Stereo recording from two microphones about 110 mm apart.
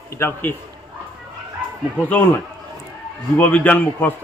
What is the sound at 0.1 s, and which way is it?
Speech, 20° left (ahead or behind).